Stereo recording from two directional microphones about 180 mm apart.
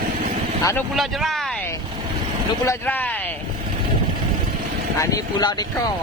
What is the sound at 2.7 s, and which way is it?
Speech, 10° left (ahead or behind).